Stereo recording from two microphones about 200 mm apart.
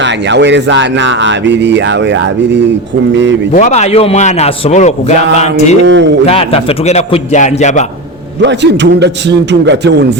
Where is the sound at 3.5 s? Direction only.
35° left (ahead or behind).